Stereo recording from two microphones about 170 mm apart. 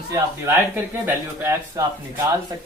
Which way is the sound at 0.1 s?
15° right (ahead or behind).